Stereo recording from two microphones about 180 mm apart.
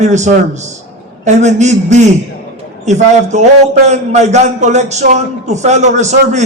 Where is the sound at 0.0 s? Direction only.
40° right (ahead or behind).